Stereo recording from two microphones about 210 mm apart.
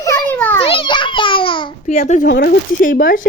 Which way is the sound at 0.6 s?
25° left (ahead or behind).